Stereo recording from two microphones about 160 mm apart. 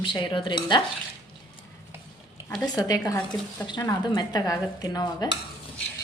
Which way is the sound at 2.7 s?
25° left (ahead or behind).